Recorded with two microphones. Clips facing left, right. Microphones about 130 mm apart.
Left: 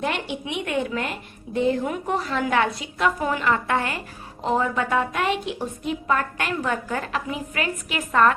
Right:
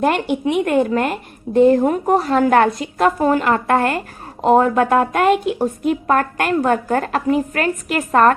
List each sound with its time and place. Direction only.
0.0 s a woman's voice: 50° right (ahead or behind)